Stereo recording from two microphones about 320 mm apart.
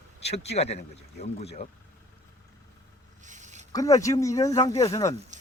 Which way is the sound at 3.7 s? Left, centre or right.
Centre.